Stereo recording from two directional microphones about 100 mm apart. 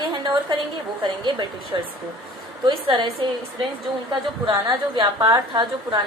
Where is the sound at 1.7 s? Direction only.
40° right (ahead or behind).